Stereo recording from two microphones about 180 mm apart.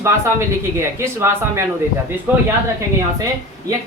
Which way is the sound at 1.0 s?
15° right (ahead or behind).